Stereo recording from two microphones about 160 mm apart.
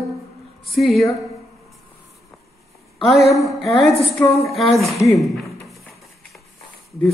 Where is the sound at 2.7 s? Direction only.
Centre (ahead or behind).